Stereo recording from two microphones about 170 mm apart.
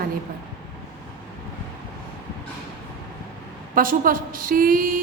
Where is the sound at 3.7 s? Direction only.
55° right (ahead or behind).